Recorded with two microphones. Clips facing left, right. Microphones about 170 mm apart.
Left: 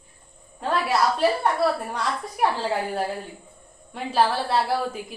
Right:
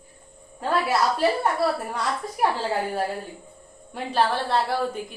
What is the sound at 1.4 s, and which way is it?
A woman's voice, centre (ahead or behind).